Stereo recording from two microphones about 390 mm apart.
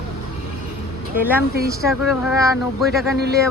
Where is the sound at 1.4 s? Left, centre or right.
Right.